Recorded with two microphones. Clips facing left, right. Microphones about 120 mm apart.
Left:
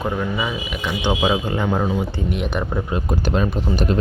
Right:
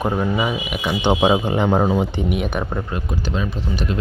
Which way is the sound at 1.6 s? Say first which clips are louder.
Right 4 dB; 35° right (ahead or behind).